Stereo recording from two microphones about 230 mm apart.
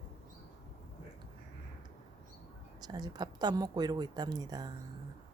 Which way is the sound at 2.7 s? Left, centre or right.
Centre.